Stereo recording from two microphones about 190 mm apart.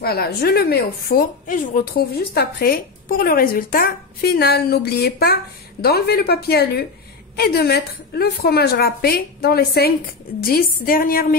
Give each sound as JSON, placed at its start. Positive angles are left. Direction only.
{"t": 0.0, "sound": "a woman's voice", "side_deg": 55}